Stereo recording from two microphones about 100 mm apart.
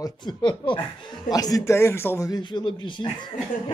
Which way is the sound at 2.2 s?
45° left (ahead or behind).